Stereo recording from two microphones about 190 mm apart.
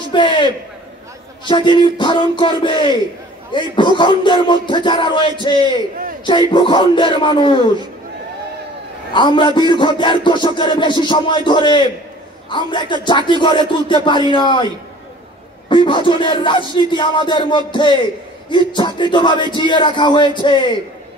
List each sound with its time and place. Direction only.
0.1 s music: 25° left (ahead or behind)
1.5 s music: 25° left (ahead or behind)
9.1 s music: 25° left (ahead or behind)
15.7 s music: 25° left (ahead or behind)